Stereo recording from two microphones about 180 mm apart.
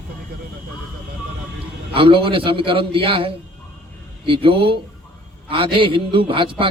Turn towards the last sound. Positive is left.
turn(degrees=-30)  # may be behind; listen again after turning